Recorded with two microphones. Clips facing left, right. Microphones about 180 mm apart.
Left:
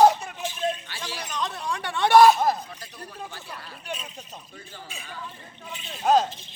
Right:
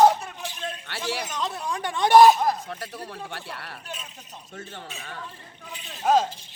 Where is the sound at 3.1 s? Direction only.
70° right (ahead or behind).